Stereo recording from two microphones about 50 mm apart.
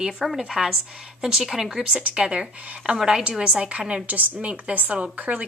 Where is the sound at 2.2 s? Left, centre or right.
Right.